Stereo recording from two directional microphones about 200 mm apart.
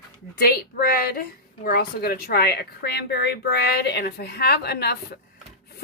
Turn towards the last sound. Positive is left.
turn(degrees=55)  # may be behind; listen again after turning